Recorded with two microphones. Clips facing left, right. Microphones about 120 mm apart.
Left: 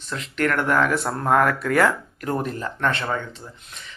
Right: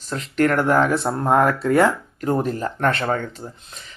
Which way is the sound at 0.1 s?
35° right (ahead or behind).